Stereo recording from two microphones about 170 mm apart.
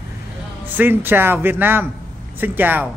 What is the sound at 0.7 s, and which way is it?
Speech, 10° right (ahead or behind).